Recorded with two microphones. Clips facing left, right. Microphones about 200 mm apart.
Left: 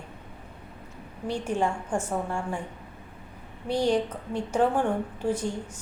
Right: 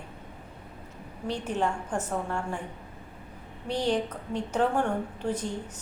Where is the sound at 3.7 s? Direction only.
10° left (ahead or behind).